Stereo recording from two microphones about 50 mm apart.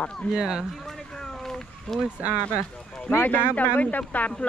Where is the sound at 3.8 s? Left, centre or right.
Left.